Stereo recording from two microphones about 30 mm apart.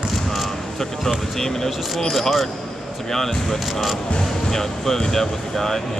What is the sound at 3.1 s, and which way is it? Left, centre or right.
Speech, centre.